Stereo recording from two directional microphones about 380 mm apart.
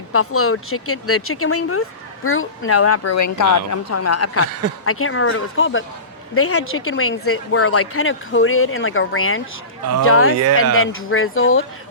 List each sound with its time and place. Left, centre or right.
0.1 s speech: left